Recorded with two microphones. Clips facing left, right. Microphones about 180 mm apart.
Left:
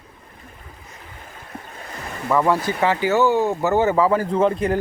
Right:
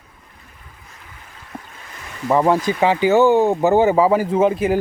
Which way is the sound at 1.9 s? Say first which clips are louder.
Left 6 dB; 45° left (ahead or behind).